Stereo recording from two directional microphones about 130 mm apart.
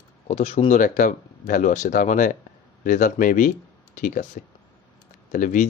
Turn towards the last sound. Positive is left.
turn(degrees=80)